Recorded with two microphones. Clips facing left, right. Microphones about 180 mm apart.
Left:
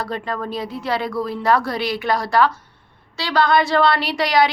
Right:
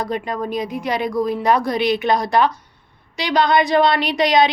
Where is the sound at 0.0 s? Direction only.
15° right (ahead or behind).